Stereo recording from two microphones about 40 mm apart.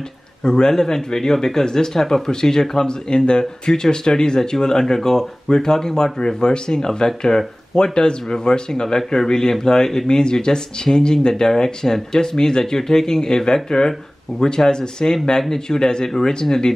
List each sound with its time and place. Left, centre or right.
0.4 s speech: centre